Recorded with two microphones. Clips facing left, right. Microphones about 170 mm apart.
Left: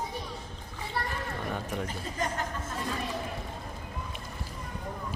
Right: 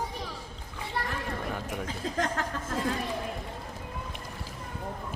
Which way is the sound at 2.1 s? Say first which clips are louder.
Right 2 dB; 90° right.